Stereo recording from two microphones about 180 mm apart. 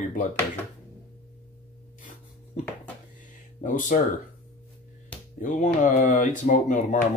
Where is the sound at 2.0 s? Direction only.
45° left (ahead or behind).